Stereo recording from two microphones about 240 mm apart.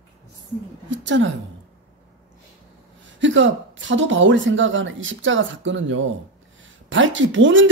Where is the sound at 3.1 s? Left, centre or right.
Right.